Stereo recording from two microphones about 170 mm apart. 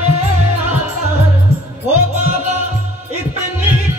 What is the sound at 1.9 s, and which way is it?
Music, 40° right (ahead or behind).